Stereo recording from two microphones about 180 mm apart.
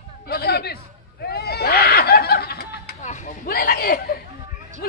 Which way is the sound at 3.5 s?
55° left (ahead or behind).